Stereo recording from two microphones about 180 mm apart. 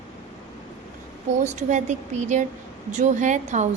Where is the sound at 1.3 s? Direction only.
40° right (ahead or behind).